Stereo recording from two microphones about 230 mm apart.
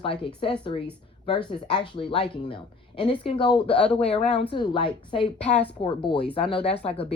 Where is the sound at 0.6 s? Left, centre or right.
Left.